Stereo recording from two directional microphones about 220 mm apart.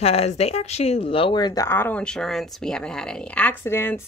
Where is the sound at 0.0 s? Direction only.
25° left (ahead or behind).